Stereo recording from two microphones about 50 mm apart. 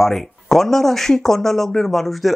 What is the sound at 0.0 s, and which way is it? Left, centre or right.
Speech, centre.